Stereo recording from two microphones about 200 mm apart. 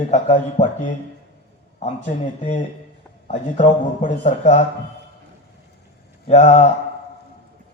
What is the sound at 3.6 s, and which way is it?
Speech, 35° left (ahead or behind).